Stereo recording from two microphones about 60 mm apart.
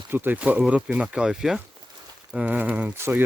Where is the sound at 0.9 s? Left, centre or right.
Centre.